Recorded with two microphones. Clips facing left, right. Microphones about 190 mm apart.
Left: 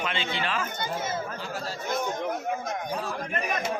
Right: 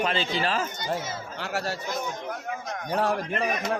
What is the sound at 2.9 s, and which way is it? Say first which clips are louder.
Speech: right 12 dB; 70° right (ahead or behind).